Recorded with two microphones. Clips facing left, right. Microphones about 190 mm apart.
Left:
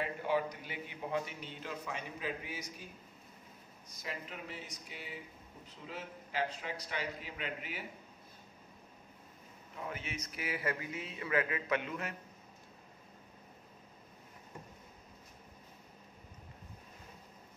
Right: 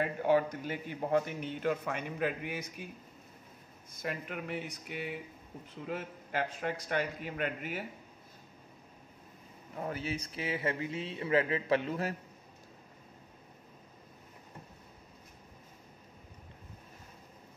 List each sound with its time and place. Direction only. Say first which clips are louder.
0.0 s a man's voice: right 6 dB; 50° right (ahead or behind)
3.9 s a man's voice: right 6 dB; 55° right (ahead or behind)
9.8 s speech: right 6 dB; 35° right (ahead or behind)